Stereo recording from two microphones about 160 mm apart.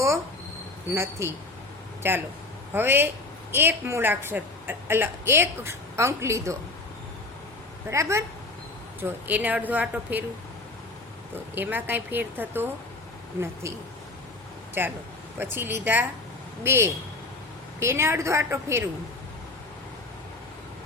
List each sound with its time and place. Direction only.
1.2 s a woman's voice: 20° right (ahead or behind)
7.9 s a woman's voice: 15° right (ahead or behind)
11.5 s a woman's voice: 10° right (ahead or behind)
14.8 s a woman's voice: 15° right (ahead or behind)